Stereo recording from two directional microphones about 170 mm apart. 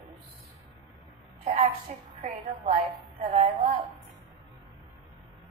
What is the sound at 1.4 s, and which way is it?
A woman's voice, 40° right (ahead or behind).